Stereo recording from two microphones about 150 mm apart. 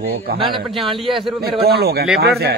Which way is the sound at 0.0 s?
90° right.